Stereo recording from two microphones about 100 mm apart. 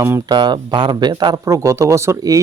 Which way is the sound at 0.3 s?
45° right (ahead or behind).